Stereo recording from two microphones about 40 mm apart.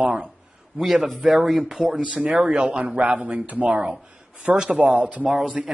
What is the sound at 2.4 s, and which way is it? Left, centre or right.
Speech, right.